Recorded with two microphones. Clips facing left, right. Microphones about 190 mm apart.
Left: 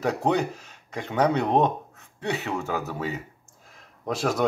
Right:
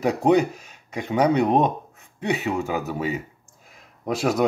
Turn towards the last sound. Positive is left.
turn(degrees=-10)  # may be behind; listen again after turning